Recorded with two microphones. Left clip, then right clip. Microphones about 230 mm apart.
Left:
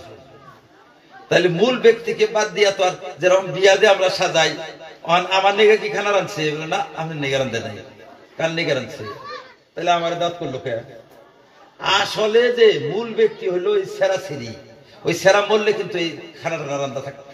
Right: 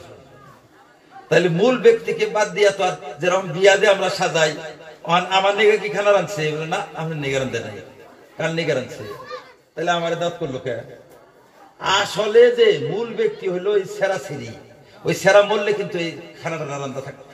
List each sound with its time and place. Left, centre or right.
1.3 s a man's voice: left
9.8 s a man's voice: left
11.8 s a man's voice: left
15.0 s a man's voice: left